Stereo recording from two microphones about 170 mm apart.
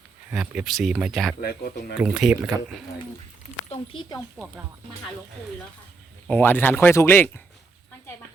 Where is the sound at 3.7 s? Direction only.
30° left (ahead or behind).